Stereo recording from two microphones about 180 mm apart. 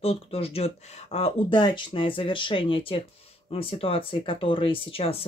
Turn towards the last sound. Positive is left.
turn(degrees=30)  # may be behind; listen again after turning